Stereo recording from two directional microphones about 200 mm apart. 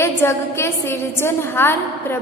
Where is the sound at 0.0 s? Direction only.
15° left (ahead or behind).